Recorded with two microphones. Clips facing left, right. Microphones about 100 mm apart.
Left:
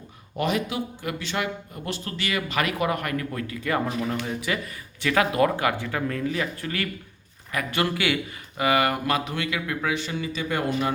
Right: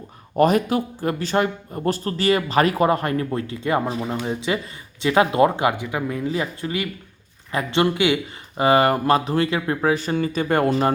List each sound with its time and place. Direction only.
0.3 s speech: 45° right (ahead or behind)